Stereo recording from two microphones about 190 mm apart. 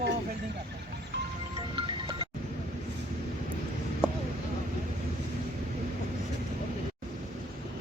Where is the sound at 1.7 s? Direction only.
25° right (ahead or behind).